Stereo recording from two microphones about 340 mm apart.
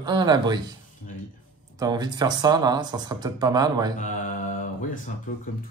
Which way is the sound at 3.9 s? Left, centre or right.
Left.